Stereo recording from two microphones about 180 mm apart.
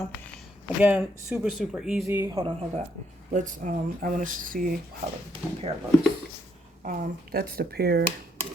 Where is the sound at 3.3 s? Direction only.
45° right (ahead or behind).